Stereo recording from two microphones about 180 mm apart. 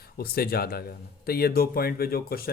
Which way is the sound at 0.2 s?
55° left (ahead or behind).